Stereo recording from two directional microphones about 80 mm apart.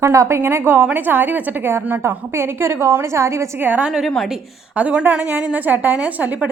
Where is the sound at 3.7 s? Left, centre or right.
Centre.